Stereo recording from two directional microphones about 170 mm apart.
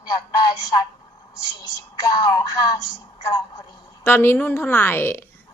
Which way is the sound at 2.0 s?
25° left (ahead or behind).